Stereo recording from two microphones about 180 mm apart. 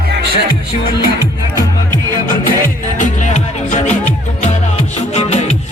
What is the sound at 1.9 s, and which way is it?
Music, 25° right (ahead or behind).